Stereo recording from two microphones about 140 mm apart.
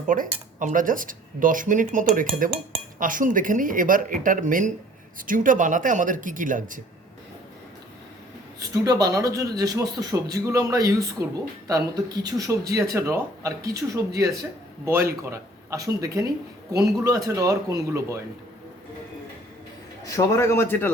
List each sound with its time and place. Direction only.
0.1 s speech: 70° right (ahead or behind)
8.5 s a man's voice: 25° right (ahead or behind)
20.1 s a man's voice: 20° left (ahead or behind)